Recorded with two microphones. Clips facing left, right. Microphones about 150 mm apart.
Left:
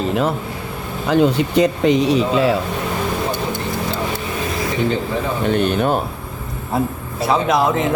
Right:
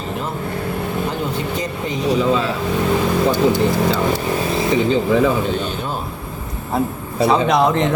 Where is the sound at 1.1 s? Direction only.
80° left.